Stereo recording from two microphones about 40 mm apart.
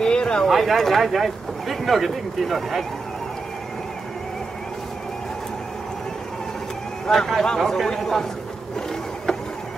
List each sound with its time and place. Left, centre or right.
0.0 s a sound: left
0.5 s speech: centre
7.1 s a man's voice: centre
8.7 s printer: centre